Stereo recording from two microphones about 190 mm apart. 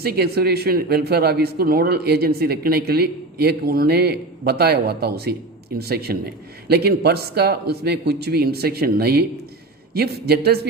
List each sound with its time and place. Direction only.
0.0 s speech: 55° right (ahead or behind)